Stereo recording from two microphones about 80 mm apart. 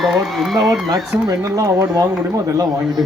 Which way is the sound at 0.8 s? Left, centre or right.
Right.